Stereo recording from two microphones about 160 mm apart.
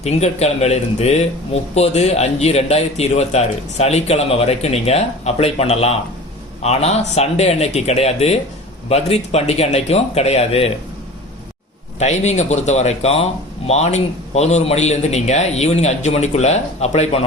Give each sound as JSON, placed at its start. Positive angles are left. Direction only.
{"t": 0.0, "sound": "a man's voice", "side_deg": 40}
{"t": 11.9, "sound": "a man's voice", "side_deg": 45}